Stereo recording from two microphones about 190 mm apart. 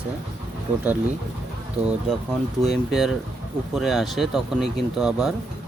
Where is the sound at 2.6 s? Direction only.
Centre (ahead or behind).